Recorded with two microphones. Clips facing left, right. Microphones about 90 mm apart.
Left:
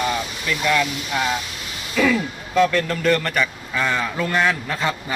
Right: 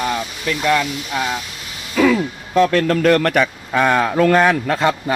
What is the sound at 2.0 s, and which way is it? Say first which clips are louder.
Speech: right 4 dB; 45° right (ahead or behind).